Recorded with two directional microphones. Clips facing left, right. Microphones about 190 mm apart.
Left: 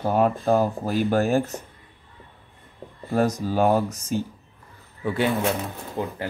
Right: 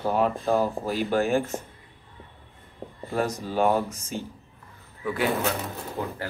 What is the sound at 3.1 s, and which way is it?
Speech, 40° left (ahead or behind).